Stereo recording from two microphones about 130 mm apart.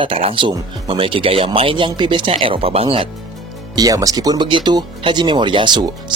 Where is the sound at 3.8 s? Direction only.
25° right (ahead or behind).